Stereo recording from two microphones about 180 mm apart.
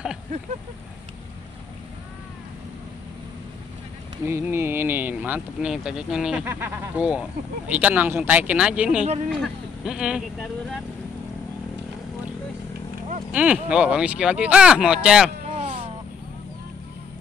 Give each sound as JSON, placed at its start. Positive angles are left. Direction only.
{"t": 4.3, "sound": "speech", "side_deg": -10}
{"t": 9.0, "sound": "speech", "side_deg": -40}
{"t": 9.4, "sound": "speech", "side_deg": -5}
{"t": 13.3, "sound": "speech", "side_deg": -5}
{"t": 15.5, "sound": "a sound", "side_deg": -30}